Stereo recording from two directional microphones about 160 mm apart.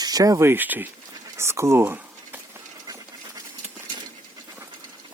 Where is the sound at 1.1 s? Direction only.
15° right (ahead or behind).